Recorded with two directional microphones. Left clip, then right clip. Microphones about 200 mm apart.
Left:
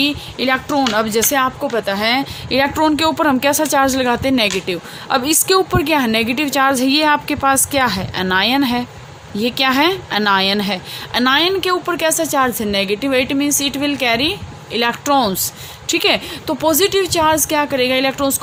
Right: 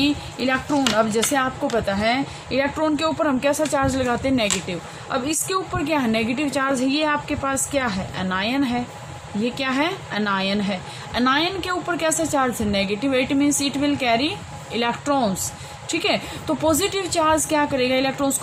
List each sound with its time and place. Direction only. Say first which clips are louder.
0.0 s a woman's voice: left 4 dB; 55° left (ahead or behind)